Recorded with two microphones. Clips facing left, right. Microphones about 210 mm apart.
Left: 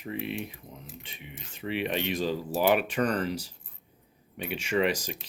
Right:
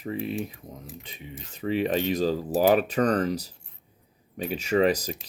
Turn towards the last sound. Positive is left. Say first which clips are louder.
# right 5 dB
turn(degrees=-35)  # may be behind; listen again after turning